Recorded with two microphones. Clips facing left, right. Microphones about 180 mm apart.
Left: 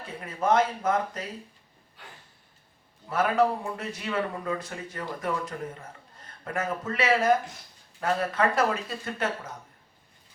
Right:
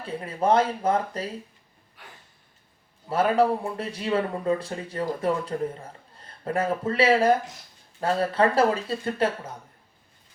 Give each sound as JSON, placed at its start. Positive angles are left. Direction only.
{"t": 0.0, "sound": "speech", "side_deg": -30}
{"t": 3.1, "sound": "speech", "side_deg": -30}